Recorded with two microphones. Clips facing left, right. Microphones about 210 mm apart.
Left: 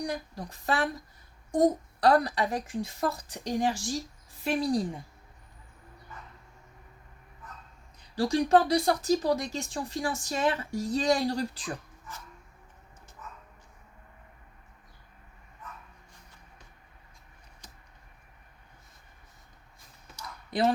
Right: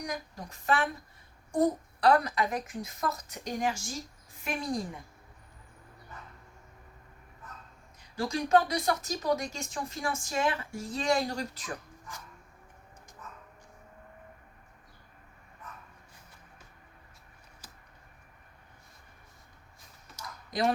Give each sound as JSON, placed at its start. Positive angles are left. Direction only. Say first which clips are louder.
{"t": 0.0, "sound": "a woman's voice", "louder": "left 4 dB", "side_deg": 35}
{"t": 8.1, "sound": "a woman's voice", "louder": "left 3 dB", "side_deg": 35}